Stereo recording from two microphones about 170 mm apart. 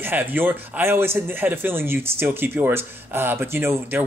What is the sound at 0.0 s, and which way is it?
Speech, 10° right (ahead or behind).